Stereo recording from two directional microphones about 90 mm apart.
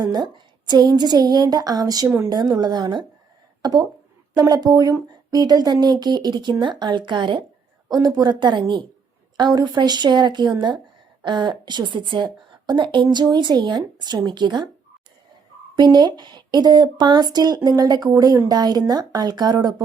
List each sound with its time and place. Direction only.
0.0 s speech: 50° right (ahead or behind)
2.0 s speech: 25° right (ahead or behind)
2.3 s speech: 50° right (ahead or behind)
7.9 s a woman's voice: 50° right (ahead or behind)
15.7 s speech: 50° right (ahead or behind)